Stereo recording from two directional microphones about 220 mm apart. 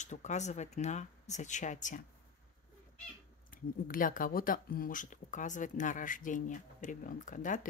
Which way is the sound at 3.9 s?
40° left (ahead or behind).